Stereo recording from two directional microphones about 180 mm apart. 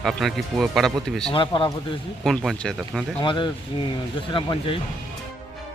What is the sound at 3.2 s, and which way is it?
Speech, 25° left (ahead or behind).